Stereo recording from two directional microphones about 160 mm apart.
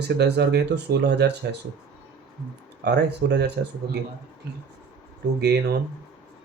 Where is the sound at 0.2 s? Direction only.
90° right.